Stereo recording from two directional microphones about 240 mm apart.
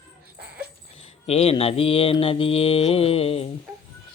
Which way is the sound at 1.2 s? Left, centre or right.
Left.